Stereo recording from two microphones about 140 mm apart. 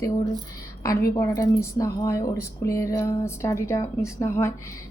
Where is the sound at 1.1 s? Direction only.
20° left (ahead or behind).